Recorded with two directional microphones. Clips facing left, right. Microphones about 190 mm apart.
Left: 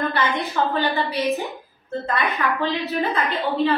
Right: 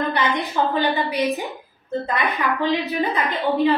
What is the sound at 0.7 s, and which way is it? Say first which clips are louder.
A woman's voice: right 2 dB; 15° right (ahead or behind).